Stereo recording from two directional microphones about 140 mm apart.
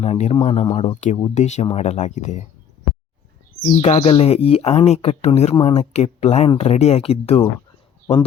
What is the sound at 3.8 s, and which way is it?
Speech, 45° left (ahead or behind).